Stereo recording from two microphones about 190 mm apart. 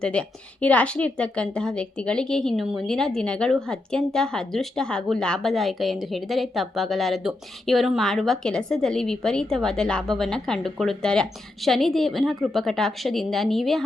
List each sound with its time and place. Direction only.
0.0 s a woman's voice: 5° left (ahead or behind)